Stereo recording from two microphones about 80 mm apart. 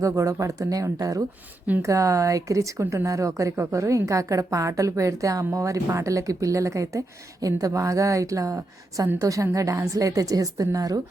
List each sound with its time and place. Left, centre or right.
0.0 s a woman's voice: right